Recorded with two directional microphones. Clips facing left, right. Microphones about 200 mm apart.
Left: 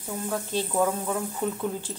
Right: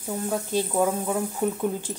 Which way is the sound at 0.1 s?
15° right (ahead or behind).